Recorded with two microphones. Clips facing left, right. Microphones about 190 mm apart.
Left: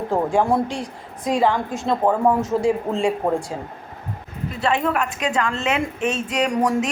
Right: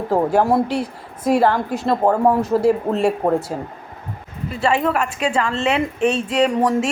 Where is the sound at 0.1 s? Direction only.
5° right (ahead or behind).